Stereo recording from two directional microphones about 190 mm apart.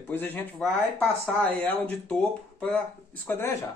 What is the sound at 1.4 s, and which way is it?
Speech, 10° left (ahead or behind).